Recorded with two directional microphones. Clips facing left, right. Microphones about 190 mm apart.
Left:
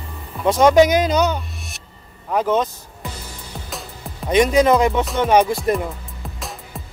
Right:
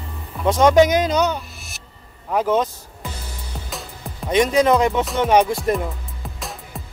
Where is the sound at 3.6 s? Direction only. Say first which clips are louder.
Even; centre (ahead or behind).